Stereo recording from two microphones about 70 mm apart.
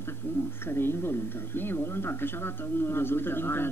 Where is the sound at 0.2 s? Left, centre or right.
Left.